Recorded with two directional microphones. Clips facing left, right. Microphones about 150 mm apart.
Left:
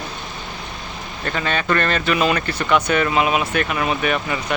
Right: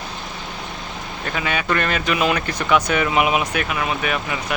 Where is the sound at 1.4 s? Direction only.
10° right (ahead or behind).